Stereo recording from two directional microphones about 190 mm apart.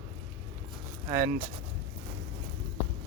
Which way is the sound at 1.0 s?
15° right (ahead or behind).